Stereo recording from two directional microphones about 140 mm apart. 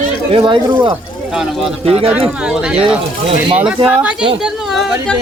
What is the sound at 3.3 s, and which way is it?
Speech, 40° right (ahead or behind).